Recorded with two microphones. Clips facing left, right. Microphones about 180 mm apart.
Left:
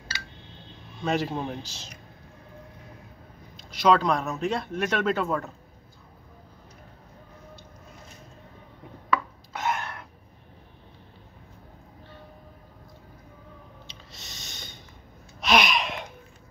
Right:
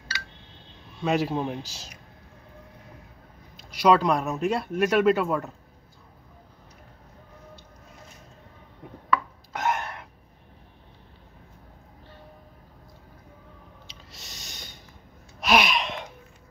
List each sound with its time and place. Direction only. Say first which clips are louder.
1.0 s speech: right 2 dB; 5° right (ahead or behind)
3.8 s speech: right 1 dB; 10° right (ahead or behind)
9.5 s a sound: right 2 dB; 15° right (ahead or behind)
14.3 s snort: even; 10° right (ahead or behind)
15.4 s gasp: right 1 dB; 5° right (ahead or behind)